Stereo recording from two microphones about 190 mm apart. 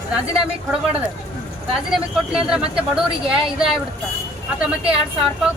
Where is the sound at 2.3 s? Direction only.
5° right (ahead or behind).